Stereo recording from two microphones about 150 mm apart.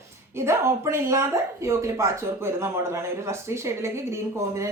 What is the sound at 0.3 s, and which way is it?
A woman's voice, 20° right (ahead or behind).